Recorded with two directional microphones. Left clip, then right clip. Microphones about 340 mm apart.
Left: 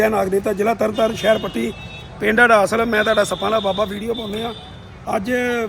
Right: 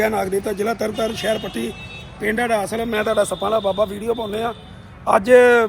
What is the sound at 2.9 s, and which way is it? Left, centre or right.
Speech, centre.